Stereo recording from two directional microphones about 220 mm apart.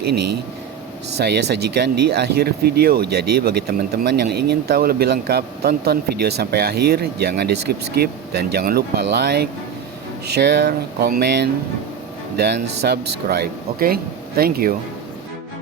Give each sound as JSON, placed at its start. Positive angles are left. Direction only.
{"t": 1.2, "sound": "speech", "side_deg": -50}
{"t": 12.8, "sound": "speech", "side_deg": -45}